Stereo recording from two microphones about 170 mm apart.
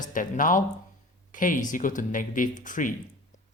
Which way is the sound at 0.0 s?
50° left (ahead or behind).